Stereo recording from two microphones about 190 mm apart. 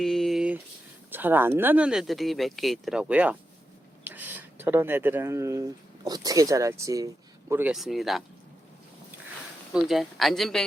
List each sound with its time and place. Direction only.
0.0 s a sound: centre (ahead or behind)
1.1 s speech: 10° right (ahead or behind)
7.5 s speech: 5° right (ahead or behind)
9.7 s speech: centre (ahead or behind)